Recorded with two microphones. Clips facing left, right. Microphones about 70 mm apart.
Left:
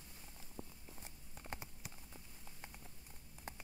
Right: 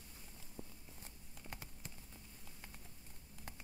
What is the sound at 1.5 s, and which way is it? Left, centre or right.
Clip-clop, centre.